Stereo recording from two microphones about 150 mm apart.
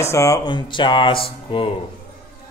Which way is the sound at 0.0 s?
20° left (ahead or behind).